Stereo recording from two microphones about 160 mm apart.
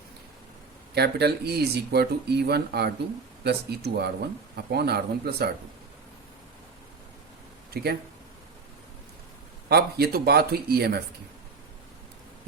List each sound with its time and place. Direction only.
0.9 s speech: 90° right
7.7 s speech: 75° right (ahead or behind)
9.6 s speech: 80° right